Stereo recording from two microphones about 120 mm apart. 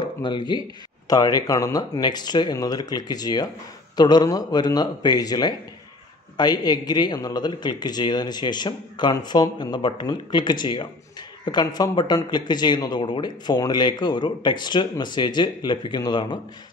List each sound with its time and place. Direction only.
0.0 s a man's voice: 40° left (ahead or behind)